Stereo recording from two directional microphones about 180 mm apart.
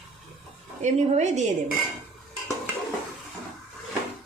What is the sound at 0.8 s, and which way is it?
Speech, 40° right (ahead or behind).